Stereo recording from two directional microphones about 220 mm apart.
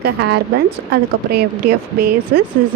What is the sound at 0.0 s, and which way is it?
Speech, 50° right (ahead or behind).